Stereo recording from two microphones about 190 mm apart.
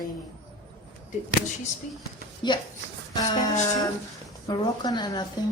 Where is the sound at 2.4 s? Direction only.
25° left (ahead or behind).